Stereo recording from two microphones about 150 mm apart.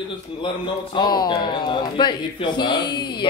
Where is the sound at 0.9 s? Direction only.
30° left (ahead or behind).